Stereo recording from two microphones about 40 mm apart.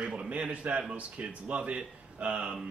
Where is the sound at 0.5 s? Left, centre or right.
Right.